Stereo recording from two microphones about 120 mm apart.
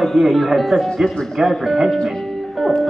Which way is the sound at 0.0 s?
Centre (ahead or behind).